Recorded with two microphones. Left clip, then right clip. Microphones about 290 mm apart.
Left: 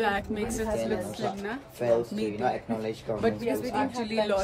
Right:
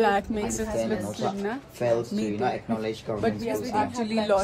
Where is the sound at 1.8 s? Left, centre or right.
Right.